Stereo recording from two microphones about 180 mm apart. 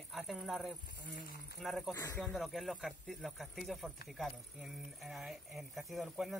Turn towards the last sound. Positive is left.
turn(degrees=0)  # may be behind; listen again after turning